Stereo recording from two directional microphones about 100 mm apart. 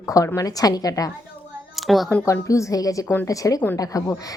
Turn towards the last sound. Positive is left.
turn(degrees=35)  # may be behind; listen again after turning